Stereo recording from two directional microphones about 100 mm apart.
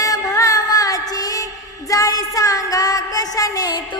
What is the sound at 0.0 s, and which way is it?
Music, 35° left (ahead or behind).